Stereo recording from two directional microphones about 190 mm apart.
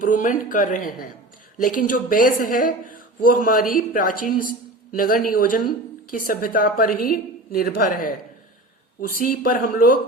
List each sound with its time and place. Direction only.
0.0 s a woman's voice: 45° left (ahead or behind)